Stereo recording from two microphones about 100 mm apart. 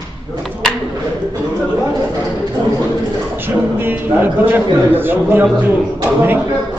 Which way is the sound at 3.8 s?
20° right (ahead or behind).